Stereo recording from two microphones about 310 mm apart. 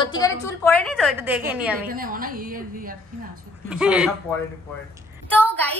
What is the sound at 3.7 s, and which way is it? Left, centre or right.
Speech, centre.